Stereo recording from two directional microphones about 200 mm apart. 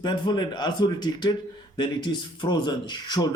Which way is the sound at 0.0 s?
20° left (ahead or behind).